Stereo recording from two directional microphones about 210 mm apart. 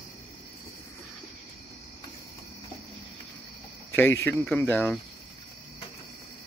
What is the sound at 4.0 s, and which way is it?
Speech, 10° left (ahead or behind).